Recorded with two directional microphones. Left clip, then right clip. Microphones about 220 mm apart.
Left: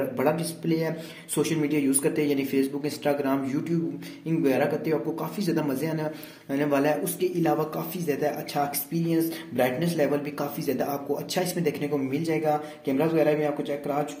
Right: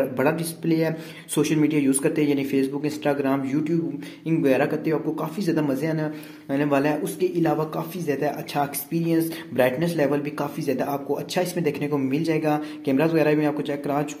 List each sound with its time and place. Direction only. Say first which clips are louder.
0.2 s speech: right 2 dB; 25° right (ahead or behind)